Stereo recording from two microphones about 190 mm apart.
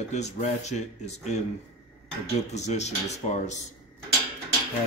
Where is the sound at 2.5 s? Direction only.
35° left (ahead or behind).